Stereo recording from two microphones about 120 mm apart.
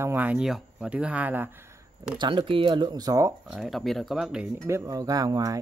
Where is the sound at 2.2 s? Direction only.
40° right (ahead or behind).